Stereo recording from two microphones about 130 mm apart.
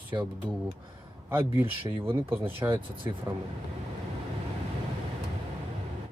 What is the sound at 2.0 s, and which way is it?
Speech, 15° right (ahead or behind).